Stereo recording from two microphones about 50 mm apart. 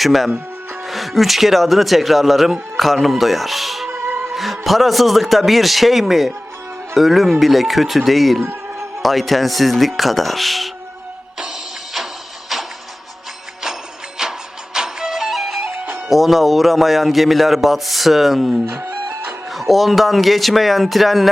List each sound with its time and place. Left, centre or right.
0.0 s speech: centre
11.3 s music: centre
14.2 s music: centre
16.0 s speech: centre
18.7 s speech: right
19.5 s speech: centre